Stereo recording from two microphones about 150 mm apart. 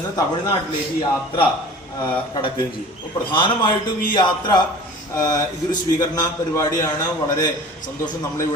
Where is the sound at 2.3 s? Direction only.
35° left (ahead or behind).